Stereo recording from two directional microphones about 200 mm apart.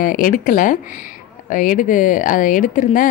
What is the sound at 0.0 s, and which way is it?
Speech, 45° left (ahead or behind).